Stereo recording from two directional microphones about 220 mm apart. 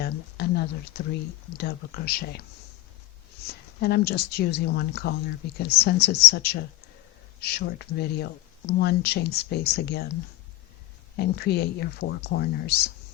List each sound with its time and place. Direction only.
0.0 s a sound: 45° left (ahead or behind)
1.5 s speech: 45° left (ahead or behind)
3.4 s speech: 45° left (ahead or behind)
11.2 s speech: 50° left (ahead or behind)